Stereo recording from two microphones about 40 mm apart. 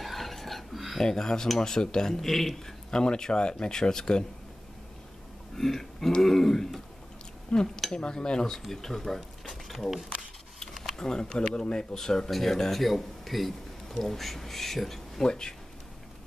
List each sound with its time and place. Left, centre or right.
0.0 s a sound: centre
1.0 s speech: centre
5.6 s speech: centre
8.6 s speech: centre
11.0 s speech: centre
12.3 s speech: centre
15.2 s speech: centre